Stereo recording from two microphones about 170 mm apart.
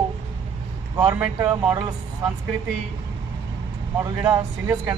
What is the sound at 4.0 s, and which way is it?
Speech, 20° right (ahead or behind).